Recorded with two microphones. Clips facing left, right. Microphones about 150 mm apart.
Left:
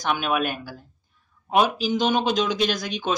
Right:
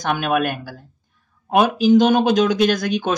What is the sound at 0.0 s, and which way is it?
Speech, 50° right (ahead or behind).